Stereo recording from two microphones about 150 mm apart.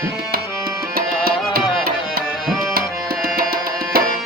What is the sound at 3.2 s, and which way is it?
Tabla, 85° right.